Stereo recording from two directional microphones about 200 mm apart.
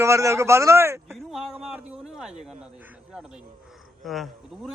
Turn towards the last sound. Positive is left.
turn(degrees=0)  # may be behind; listen again after turning